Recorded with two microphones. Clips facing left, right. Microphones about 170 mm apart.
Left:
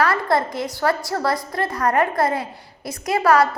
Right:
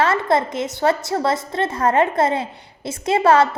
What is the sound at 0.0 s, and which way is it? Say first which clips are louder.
A woman's voice: right 1 dB; 20° right (ahead or behind).